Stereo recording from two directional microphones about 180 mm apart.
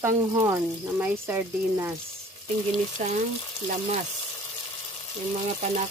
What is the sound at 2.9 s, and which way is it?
Speech, 40° right (ahead or behind).